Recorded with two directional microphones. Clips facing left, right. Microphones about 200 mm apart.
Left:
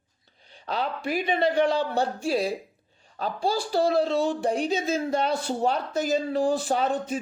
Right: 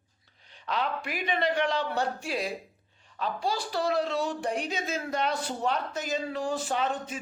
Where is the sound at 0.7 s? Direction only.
35° left (ahead or behind).